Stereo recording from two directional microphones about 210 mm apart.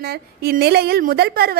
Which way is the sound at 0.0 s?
50° right (ahead or behind).